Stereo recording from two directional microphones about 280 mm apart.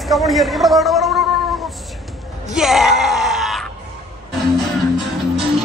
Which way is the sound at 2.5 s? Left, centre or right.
Centre.